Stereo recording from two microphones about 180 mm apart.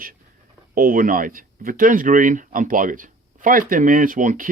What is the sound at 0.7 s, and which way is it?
Speech, 50° right (ahead or behind).